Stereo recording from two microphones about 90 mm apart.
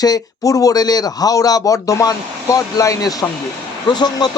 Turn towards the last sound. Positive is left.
turn(degrees=50)  # may be behind; listen again after turning